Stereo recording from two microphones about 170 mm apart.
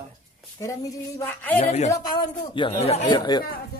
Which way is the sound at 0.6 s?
20° left (ahead or behind).